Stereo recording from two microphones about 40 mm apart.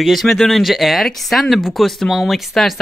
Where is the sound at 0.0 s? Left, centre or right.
Centre.